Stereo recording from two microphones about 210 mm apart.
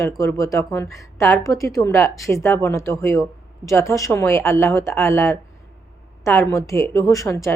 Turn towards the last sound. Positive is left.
turn(degrees=15)  # may be behind; listen again after turning